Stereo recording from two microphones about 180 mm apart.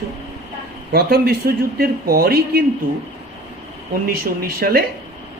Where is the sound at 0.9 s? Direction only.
60° right (ahead or behind).